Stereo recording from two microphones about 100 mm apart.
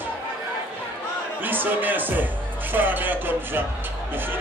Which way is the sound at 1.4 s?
20° right (ahead or behind).